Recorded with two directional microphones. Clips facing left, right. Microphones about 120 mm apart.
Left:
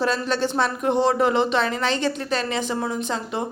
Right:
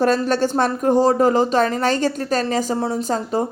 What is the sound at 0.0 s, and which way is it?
Speech, 45° right (ahead or behind).